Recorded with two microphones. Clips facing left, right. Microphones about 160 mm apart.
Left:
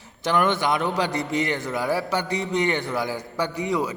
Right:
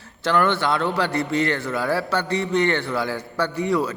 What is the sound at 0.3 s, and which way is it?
A man's voice, 15° left (ahead or behind).